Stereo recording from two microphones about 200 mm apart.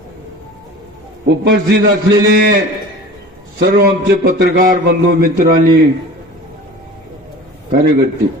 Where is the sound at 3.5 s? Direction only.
55° right (ahead or behind).